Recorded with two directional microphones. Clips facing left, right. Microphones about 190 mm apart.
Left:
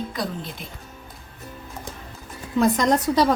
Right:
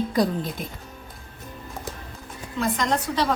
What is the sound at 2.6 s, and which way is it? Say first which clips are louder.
Speech: left 6 dB; 40° left (ahead or behind).